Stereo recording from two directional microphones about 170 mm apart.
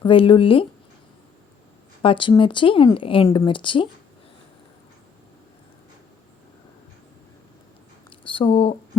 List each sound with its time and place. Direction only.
0.0 s speech: 30° left (ahead or behind)
2.0 s speech: 30° left (ahead or behind)
8.2 s speech: 30° left (ahead or behind)